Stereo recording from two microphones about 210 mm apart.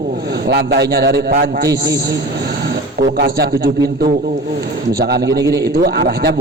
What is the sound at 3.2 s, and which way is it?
A man's voice, 50° right (ahead or behind).